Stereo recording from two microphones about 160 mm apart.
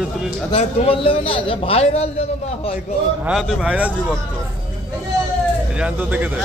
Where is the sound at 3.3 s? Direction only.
Centre (ahead or behind).